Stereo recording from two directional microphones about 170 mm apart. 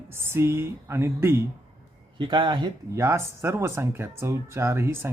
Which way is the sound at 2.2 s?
25° right (ahead or behind).